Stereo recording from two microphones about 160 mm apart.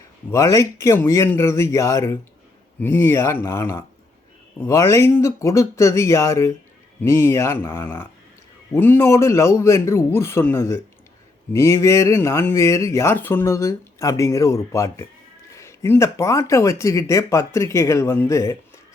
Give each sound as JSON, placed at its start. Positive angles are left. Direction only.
{"t": 0.3, "sound": "speech", "side_deg": 20}